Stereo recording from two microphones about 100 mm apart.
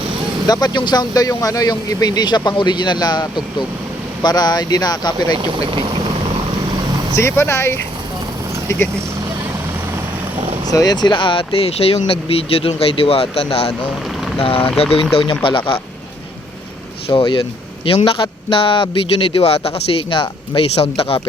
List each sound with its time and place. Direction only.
0.4 s speech: 40° left (ahead or behind)
7.2 s speech: 25° left (ahead or behind)
10.7 s speech: 40° left (ahead or behind); by 15.0 s 75° left (ahead or behind)
15.1 s speech: 60° left (ahead or behind)
17.1 s speech: 55° left (ahead or behind)
20.7 s speech: 90° left